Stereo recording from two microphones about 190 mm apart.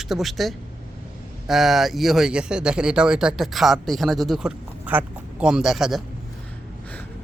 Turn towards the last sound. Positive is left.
turn(degrees=0)  # may be behind; listen again after turning